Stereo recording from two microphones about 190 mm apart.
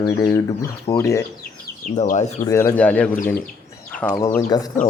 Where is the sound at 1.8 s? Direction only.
40° left (ahead or behind).